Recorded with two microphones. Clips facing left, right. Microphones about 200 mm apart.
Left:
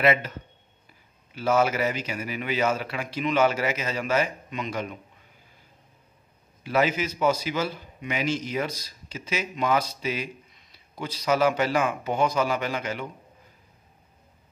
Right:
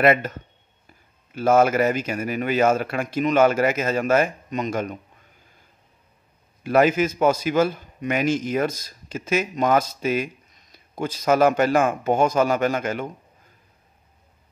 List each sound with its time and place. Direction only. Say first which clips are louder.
0.0 s a man's voice: right 4 dB; 50° right (ahead or behind)
6.6 s a man's voice: right 6 dB; 50° right (ahead or behind)